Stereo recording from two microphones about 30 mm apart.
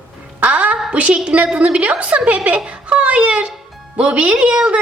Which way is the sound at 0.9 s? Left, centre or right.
Right.